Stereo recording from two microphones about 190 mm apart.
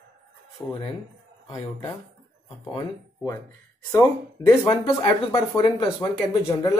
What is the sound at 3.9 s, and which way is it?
Speech, 20° left (ahead or behind).